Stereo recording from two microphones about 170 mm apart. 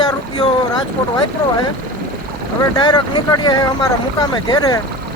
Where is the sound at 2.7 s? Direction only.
25° left (ahead or behind).